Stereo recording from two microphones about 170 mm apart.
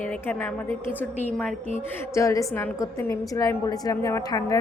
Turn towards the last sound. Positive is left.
turn(degrees=20)  # may be behind; listen again after turning